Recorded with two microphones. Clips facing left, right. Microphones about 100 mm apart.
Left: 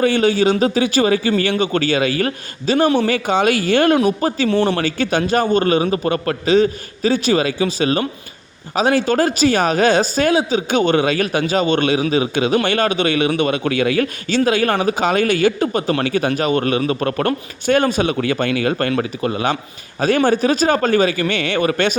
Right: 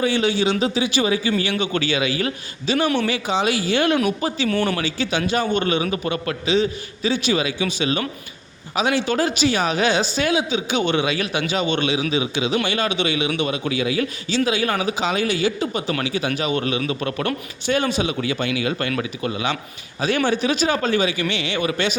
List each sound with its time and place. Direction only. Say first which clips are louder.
0.0 s a man's voice: left 5 dB; 50° left (ahead or behind)
4.4 s speech: left 5 dB; 30° left (ahead or behind)
4.8 s a man's voice: left 5 dB; 50° left (ahead or behind)